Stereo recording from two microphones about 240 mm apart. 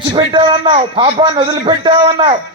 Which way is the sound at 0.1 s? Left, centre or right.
Right.